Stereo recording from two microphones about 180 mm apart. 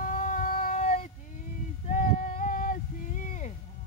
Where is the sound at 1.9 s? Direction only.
50° left (ahead or behind).